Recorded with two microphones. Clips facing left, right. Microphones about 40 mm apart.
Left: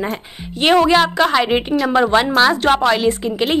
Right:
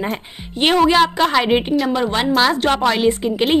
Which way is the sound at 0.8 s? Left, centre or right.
Centre.